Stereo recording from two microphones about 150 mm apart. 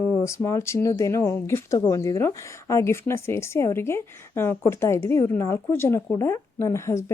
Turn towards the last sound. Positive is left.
turn(degrees=20)  # may be behind; listen again after turning